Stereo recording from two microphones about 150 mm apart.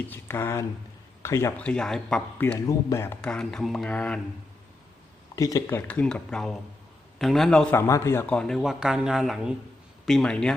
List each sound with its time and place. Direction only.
0.1 s speech: 15° left (ahead or behind)
1.6 s speech: 5° left (ahead or behind)
2.4 s speech: 15° left (ahead or behind)
5.4 s speech: 20° left (ahead or behind)
6.0 s speech: 5° left (ahead or behind)
7.8 s speech: 20° left (ahead or behind)
8.4 s speech: centre (ahead or behind)